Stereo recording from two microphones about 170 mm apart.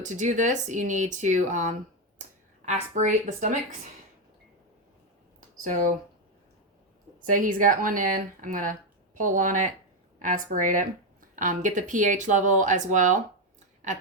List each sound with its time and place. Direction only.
0.0 s speech: 45° right (ahead or behind)
7.3 s speech: 50° right (ahead or behind)